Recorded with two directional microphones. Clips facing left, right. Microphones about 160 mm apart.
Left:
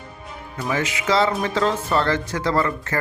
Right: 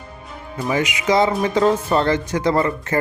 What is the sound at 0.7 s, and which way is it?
Music, 15° right (ahead or behind).